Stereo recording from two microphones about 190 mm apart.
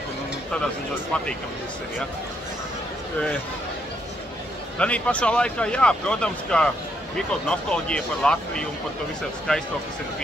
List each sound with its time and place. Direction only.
4.7 s speech: 5° left (ahead or behind)